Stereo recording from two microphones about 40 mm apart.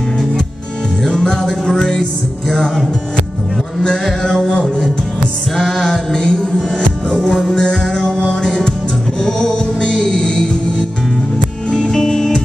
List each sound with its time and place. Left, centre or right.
1.0 s music: centre
4.0 s music: centre
5.6 s music: centre
7.2 s music: centre
7.5 s music: left
11.7 s music: centre